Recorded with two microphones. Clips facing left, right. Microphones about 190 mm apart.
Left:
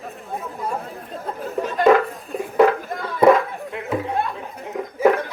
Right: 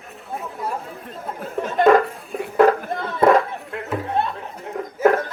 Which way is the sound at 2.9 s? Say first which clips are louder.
Right 2 dB; 25° right (ahead or behind).